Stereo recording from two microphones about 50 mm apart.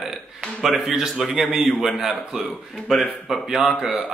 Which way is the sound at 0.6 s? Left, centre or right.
Centre.